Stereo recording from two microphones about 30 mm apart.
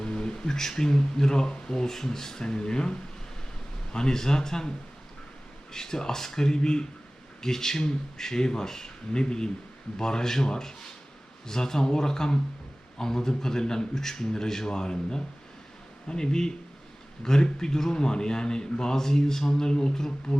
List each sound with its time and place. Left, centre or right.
0.0 s speech: left
2.5 s speech: left
5.7 s a man's voice: left